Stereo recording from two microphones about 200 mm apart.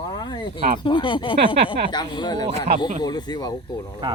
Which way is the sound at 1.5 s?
25° right (ahead or behind).